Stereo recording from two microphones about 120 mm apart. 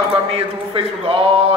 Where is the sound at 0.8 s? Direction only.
50° right (ahead or behind).